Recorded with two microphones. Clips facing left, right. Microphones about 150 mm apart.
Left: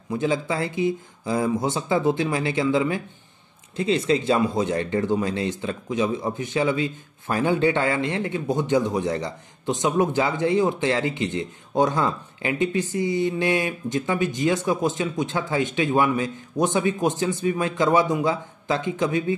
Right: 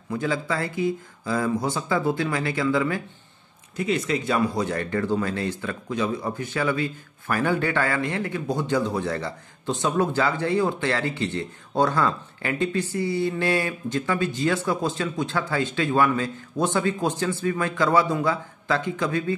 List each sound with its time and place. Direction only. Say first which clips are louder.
0.1 s speech: left 2 dB; 20° left (ahead or behind)